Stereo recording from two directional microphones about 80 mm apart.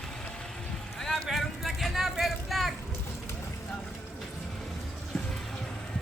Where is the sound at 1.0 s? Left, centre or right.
Centre.